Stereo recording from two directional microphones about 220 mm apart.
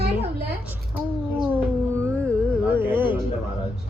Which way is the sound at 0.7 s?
5° right (ahead or behind).